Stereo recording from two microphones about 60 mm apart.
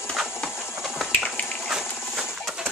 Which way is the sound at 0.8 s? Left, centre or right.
Centre.